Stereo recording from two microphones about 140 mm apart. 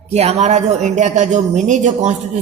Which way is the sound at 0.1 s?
50° right (ahead or behind).